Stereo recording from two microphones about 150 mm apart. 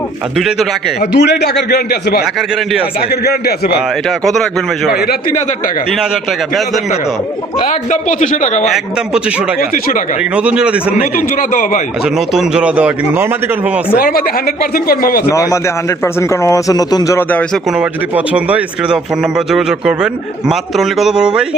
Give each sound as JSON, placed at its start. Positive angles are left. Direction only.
{"t": 0.3, "sound": "speech", "side_deg": 0}
{"t": 1.1, "sound": "a man's voice", "side_deg": 90}
{"t": 4.9, "sound": "a man's voice", "side_deg": 90}
{"t": 7.6, "sound": "a man's voice", "side_deg": 55}
{"t": 8.6, "sound": "speech", "side_deg": 0}
{"t": 9.6, "sound": "speech", "side_deg": 70}
{"t": 10.3, "sound": "speech", "side_deg": -5}
{"t": 11.0, "sound": "a man's voice", "side_deg": 60}
{"t": 12.0, "sound": "speech", "side_deg": -5}
{"t": 13.9, "sound": "speech", "side_deg": 85}
{"t": 15.3, "sound": "speech", "side_deg": 20}
{"t": 17.2, "sound": "a man's voice", "side_deg": 10}
{"t": 17.7, "sound": "speech", "side_deg": -10}